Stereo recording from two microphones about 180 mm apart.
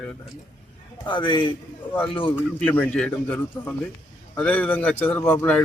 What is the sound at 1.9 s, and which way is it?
Speech, 10° left (ahead or behind).